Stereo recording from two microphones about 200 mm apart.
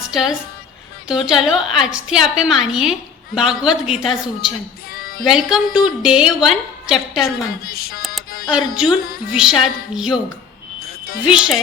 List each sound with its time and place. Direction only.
0.1 s a woman's voice: centre (ahead or behind)
7.3 s a woman's voice: 50° left (ahead or behind)
8.5 s a woman's voice: 5° right (ahead or behind)
10.8 s music: 50° left (ahead or behind)
11.3 s a woman's voice: 5° right (ahead or behind)